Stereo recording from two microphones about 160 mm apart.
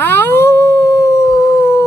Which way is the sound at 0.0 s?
10° left (ahead or behind).